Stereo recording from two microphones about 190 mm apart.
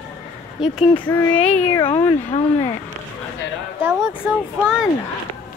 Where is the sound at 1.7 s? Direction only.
25° left (ahead or behind).